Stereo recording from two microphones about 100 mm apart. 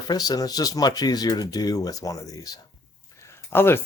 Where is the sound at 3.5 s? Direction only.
25° left (ahead or behind).